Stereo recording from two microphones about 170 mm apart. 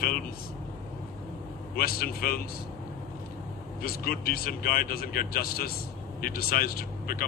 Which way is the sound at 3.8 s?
60° left (ahead or behind).